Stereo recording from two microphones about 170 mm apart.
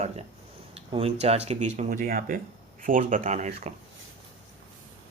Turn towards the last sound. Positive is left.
turn(degrees=-45)  # may be behind; listen again after turning